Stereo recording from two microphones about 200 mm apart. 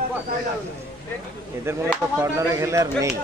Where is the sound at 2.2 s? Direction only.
15° right (ahead or behind).